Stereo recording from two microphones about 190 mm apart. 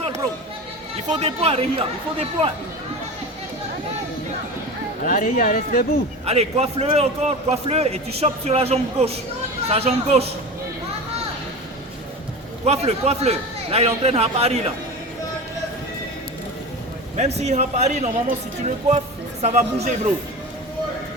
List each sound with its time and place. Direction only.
1.0 s a man's voice: 35° right (ahead or behind)
5.0 s speech: 45° left (ahead or behind)
6.2 s a man's voice: 30° right (ahead or behind)
12.6 s a man's voice: 35° right (ahead or behind)
17.2 s a man's voice: 35° right (ahead or behind)